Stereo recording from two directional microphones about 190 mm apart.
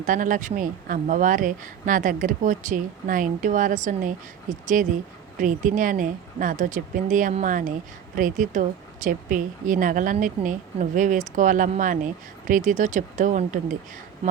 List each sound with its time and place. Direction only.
0.0 s a woman's voice: 45° right (ahead or behind)